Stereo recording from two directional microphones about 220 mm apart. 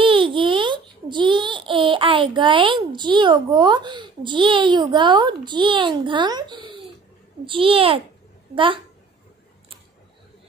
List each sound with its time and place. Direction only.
0.0 s a child's voice: 25° right (ahead or behind)